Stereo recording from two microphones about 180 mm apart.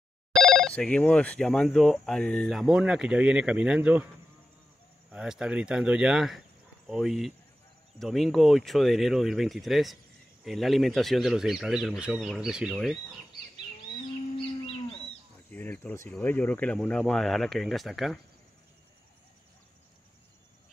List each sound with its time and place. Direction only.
0.3 s speech: centre (ahead or behind)
5.1 s speech: 5° right (ahead or behind)
14.3 s cattle: 30° left (ahead or behind)
15.5 s speech: 10° left (ahead or behind)